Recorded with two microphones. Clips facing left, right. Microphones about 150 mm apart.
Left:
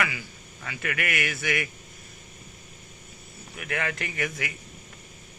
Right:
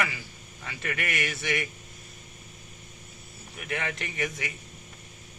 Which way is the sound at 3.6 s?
25° right (ahead or behind).